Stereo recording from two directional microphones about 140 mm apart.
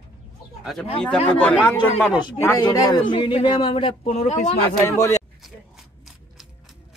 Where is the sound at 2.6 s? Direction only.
30° left (ahead or behind); by 4.6 s 50° left (ahead or behind).